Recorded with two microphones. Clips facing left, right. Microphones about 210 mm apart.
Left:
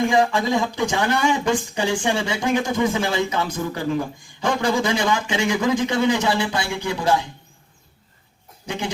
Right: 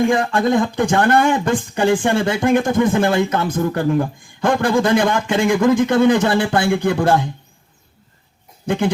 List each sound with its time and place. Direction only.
0.1 s speech: 55° right (ahead or behind)
8.6 s speech: 55° right (ahead or behind)